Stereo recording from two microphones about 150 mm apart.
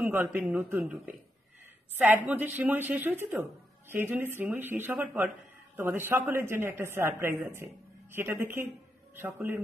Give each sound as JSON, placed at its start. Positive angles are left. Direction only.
{"t": 0.0, "sound": "a woman's voice", "side_deg": -15}
{"t": 2.0, "sound": "a woman's voice", "side_deg": -10}